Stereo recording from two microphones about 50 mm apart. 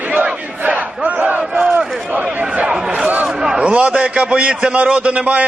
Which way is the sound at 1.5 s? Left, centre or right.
Centre.